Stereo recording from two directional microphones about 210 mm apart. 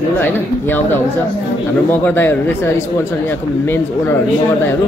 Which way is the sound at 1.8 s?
10° left (ahead or behind).